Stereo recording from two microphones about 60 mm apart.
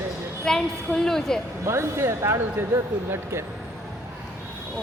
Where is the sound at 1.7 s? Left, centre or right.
Right.